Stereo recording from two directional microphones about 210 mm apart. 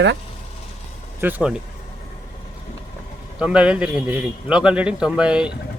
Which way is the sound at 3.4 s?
5° right (ahead or behind).